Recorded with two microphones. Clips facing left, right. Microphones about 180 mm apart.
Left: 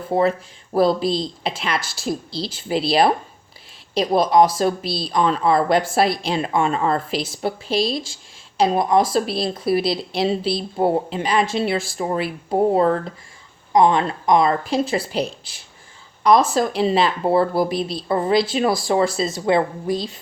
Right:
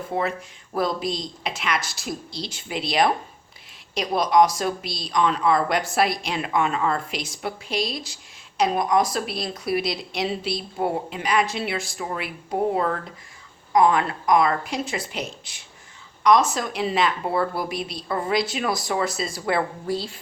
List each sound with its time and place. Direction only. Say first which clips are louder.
0.1 s speech: left 8 dB; 30° left (ahead or behind)